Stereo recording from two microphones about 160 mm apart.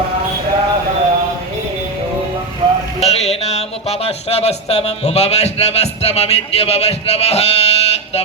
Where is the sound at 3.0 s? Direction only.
40° left (ahead or behind).